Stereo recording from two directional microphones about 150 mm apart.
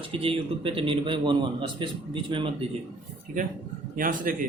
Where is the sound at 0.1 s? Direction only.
40° right (ahead or behind).